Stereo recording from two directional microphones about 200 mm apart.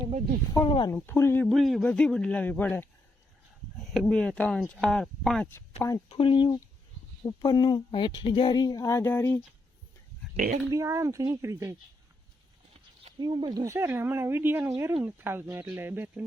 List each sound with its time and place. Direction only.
0.5 s speech: 20° left (ahead or behind)
0.9 s a man's voice: 10° left (ahead or behind)
3.9 s a man's voice: 5° left (ahead or behind)
6.1 s speech: 25° left (ahead or behind); by 9.4 s 10° left (ahead or behind)
10.3 s speech: 40° right (ahead or behind)
10.7 s speech: 15° right (ahead or behind)
13.1 s speech: 20° right (ahead or behind)